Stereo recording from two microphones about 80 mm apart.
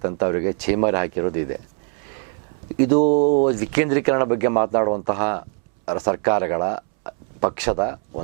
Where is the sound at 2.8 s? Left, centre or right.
Centre.